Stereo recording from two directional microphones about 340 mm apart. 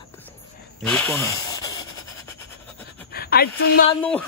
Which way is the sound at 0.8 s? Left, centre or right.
Centre.